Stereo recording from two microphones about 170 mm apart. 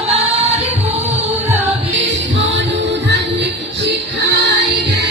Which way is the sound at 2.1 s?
90° right.